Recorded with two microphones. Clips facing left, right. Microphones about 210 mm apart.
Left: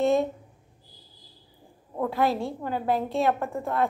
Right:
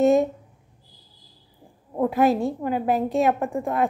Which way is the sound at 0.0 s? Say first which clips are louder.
Right 5 dB; 15° right (ahead or behind).